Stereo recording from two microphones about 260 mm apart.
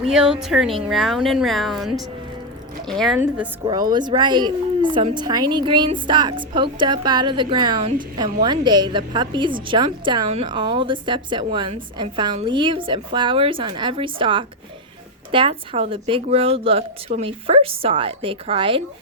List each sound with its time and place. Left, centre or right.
0.1 s a woman's voice: centre; by 18.8 s right